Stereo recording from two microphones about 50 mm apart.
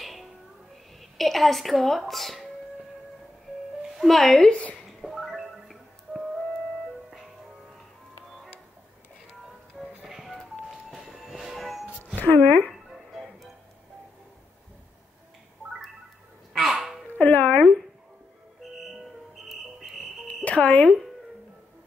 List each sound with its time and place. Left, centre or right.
0.0 s music: centre
1.1 s a woman's voice: centre
4.1 s speech: centre
4.5 s speech: left
4.8 s music: centre
9.8 s train: centre
12.2 s speech: left
12.9 s music: centre
16.5 s a sound: centre
17.1 s a sound: left
18.6 s music: centre
20.4 s speech: left